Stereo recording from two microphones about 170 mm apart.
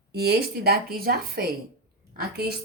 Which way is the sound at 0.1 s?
70° right (ahead or behind).